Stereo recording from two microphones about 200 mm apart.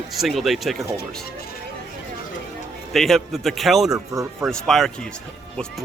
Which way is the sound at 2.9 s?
Centre (ahead or behind).